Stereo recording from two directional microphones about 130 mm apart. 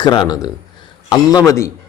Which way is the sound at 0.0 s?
35° left (ahead or behind).